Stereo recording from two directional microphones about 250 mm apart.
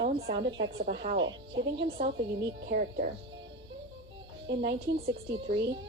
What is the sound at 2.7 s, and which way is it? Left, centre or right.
Speech, right.